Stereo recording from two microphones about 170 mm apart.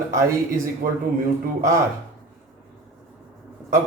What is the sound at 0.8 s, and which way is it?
Speech, 60° right (ahead or behind).